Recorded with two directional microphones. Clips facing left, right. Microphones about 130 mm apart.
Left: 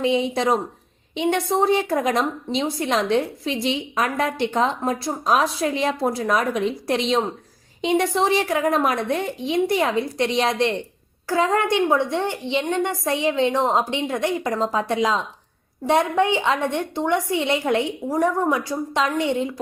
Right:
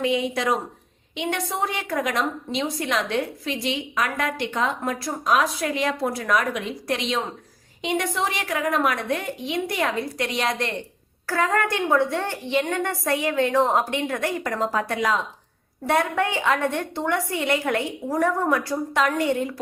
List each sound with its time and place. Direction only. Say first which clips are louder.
0.0 s a woman's voice: left 3 dB; 30° left (ahead or behind)